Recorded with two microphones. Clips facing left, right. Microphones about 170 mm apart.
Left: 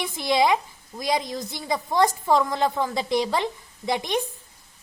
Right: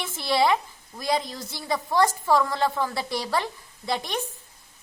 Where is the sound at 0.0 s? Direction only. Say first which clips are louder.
Left 2 dB; 15° left (ahead or behind).